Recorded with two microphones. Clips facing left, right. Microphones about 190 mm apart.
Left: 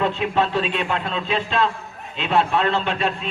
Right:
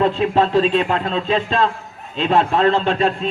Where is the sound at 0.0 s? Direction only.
35° right (ahead or behind).